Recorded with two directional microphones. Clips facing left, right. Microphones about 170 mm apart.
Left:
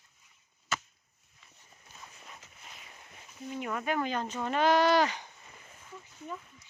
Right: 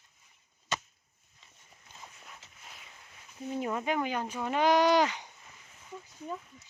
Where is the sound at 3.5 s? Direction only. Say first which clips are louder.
Right 2 dB; 30° right (ahead or behind).